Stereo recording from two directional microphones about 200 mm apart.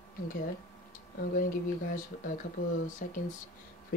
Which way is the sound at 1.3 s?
45° left (ahead or behind).